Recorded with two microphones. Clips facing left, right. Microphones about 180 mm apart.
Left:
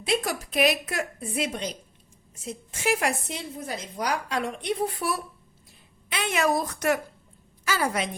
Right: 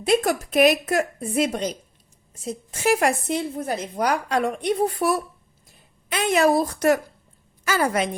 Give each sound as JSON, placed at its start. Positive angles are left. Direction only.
{"t": 0.0, "sound": "a woman's voice", "side_deg": -50}
{"t": 7.7, "sound": "a woman's voice", "side_deg": -50}